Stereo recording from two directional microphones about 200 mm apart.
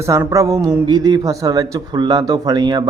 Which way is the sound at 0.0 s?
15° right (ahead or behind).